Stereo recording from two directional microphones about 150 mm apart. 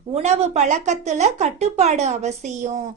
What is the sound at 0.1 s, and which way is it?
A woman's voice, 45° right (ahead or behind).